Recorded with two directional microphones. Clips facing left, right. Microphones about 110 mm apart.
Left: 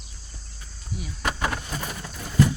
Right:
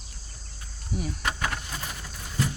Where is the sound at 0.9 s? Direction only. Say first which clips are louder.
Right 4 dB; 45° right (ahead or behind).